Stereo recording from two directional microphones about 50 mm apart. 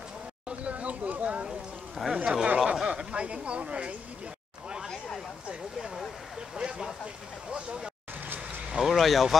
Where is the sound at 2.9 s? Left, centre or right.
Centre.